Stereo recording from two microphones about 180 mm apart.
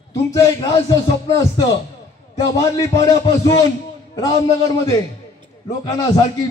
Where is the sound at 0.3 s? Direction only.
20° left (ahead or behind).